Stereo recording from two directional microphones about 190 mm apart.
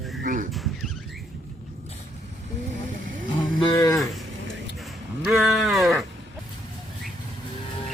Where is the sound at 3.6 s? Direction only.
15° left (ahead or behind).